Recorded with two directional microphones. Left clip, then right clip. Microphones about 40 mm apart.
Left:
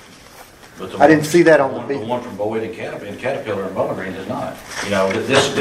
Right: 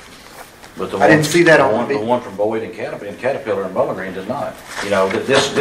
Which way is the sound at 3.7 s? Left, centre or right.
Right.